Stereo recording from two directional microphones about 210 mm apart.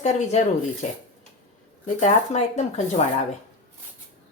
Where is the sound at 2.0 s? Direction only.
30° left (ahead or behind).